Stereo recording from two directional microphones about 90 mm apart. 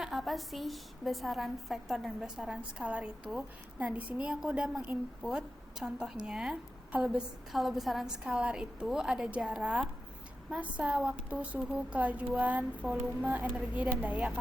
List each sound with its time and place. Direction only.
0.0 s a woman's voice: 5° right (ahead or behind)